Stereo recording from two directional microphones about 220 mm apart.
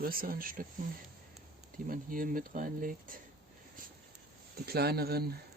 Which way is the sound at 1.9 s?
40° right (ahead or behind).